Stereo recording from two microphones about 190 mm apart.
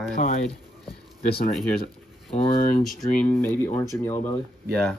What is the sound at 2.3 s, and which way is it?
Speech, 30° left (ahead or behind).